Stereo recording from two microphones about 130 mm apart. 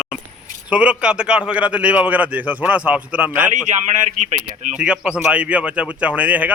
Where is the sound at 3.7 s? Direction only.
65° right (ahead or behind).